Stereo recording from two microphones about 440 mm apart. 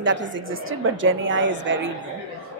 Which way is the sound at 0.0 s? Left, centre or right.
Right.